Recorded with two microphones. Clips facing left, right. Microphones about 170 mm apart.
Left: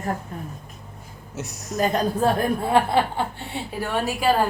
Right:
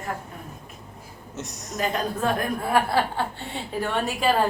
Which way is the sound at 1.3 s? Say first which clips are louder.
Left 3 dB; 5° left (ahead or behind).